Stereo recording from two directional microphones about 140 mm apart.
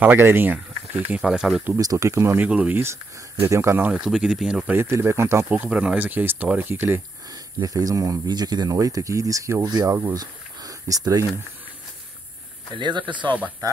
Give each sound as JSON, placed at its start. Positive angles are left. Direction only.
{"t": 0.0, "sound": "speech", "side_deg": -15}
{"t": 1.7, "sound": "speech", "side_deg": -25}
{"t": 3.9, "sound": "speech", "side_deg": -5}
{"t": 4.7, "sound": "speech", "side_deg": -20}
{"t": 7.2, "sound": "speech", "side_deg": -25}
{"t": 12.7, "sound": "speech", "side_deg": -35}